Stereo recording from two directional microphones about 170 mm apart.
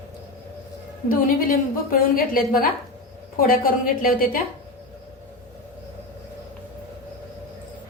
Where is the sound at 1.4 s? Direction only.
55° left (ahead or behind).